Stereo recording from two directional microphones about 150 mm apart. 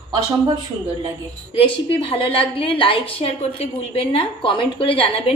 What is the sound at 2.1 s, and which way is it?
A woman's voice, 35° left (ahead or behind).